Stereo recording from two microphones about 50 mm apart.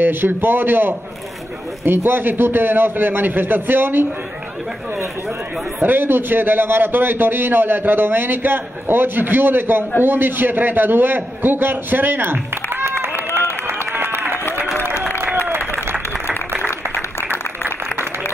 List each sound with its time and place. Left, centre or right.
0.0 s a man's voice: right
5.8 s a man's voice: right